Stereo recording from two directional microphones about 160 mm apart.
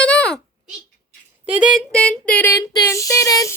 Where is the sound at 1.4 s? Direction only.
10° right (ahead or behind).